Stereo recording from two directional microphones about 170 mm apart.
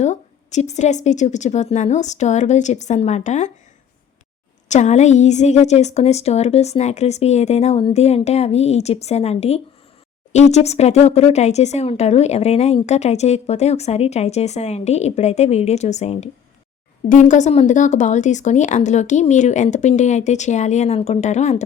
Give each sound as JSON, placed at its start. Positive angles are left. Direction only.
{"t": 0.0, "sound": "speech", "side_deg": 45}
{"t": 4.7, "sound": "speech", "side_deg": 45}